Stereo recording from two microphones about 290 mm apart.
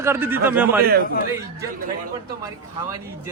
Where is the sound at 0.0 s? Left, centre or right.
Centre.